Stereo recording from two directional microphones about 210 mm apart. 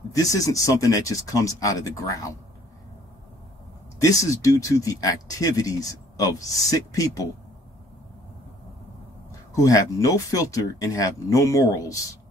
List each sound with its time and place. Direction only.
0.1 s speech: 15° left (ahead or behind)
4.0 s speech: 15° left (ahead or behind)
9.6 s speech: 15° left (ahead or behind)